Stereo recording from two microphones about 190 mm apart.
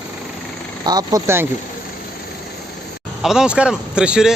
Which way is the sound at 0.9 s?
20° right (ahead or behind).